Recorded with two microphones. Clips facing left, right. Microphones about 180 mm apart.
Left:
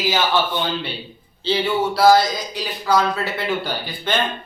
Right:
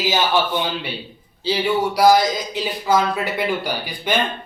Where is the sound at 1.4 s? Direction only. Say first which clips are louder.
Even; 10° right (ahead or behind).